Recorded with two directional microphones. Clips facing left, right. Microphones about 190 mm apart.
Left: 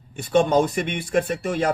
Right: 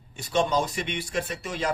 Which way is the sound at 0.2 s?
55° left (ahead or behind).